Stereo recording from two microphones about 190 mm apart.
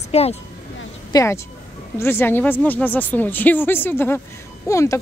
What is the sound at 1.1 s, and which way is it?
Speech, 20° left (ahead or behind).